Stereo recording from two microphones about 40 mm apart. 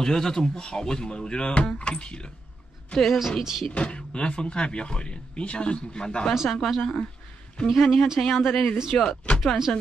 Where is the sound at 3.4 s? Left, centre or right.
Centre.